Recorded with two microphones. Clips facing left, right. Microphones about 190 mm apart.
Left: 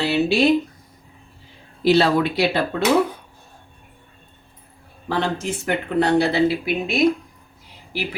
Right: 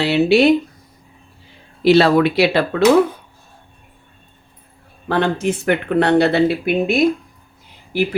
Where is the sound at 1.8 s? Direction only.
70° right (ahead or behind).